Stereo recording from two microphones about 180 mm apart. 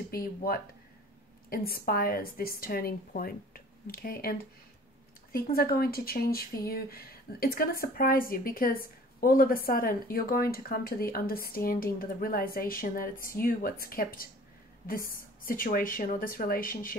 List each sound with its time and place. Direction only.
0.1 s a woman's voice: 55° left (ahead or behind)